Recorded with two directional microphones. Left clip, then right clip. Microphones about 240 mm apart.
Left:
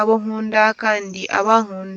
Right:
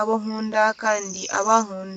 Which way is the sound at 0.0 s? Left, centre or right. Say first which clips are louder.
Left 6 dB; left.